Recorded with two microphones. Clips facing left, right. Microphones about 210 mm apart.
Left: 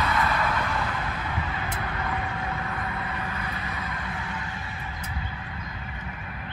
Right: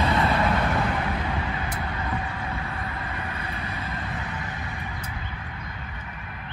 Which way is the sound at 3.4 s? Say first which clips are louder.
Right 1 dB; 30° right (ahead or behind).